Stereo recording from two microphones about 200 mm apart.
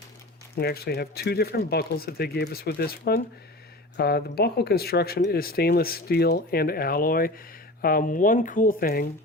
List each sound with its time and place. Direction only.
0.5 s speech: 50° left (ahead or behind)